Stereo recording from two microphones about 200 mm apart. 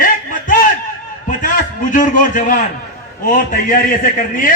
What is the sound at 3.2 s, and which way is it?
A man's voice, 40° left (ahead or behind).